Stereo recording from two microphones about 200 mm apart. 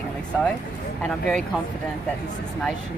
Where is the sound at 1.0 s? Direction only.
5° left (ahead or behind).